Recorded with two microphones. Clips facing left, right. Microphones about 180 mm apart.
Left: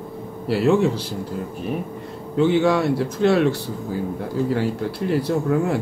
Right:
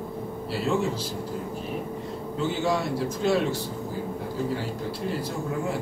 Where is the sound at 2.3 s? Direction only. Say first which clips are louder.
Left 9 dB; 65° left (ahead or behind).